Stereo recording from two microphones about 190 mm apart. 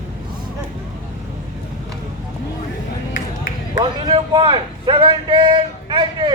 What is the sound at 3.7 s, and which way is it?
A man's voice, 25° right (ahead or behind).